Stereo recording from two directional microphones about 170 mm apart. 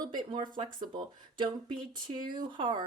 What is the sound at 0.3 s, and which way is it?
A woman's voice, 25° right (ahead or behind).